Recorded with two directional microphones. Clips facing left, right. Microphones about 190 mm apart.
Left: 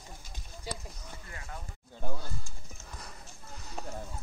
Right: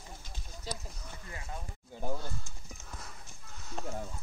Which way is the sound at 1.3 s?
20° right (ahead or behind).